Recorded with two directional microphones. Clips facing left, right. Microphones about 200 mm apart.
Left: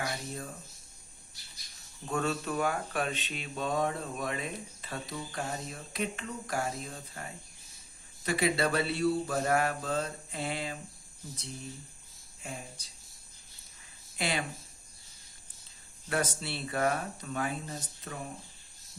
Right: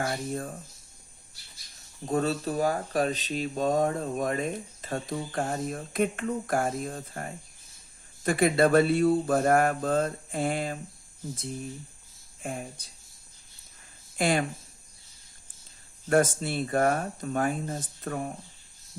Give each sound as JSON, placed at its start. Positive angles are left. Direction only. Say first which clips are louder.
{"t": 0.0, "sound": "speech", "louder": "right 6 dB", "side_deg": -50}
{"t": 2.0, "sound": "speech", "louder": "right 5 dB", "side_deg": -35}
{"t": 12.4, "sound": "speech", "louder": "right 7 dB", "side_deg": -55}
{"t": 14.2, "sound": "speech", "louder": "right 8 dB", "side_deg": -50}
{"t": 16.0, "sound": "speech", "louder": "right 9 dB", "side_deg": -50}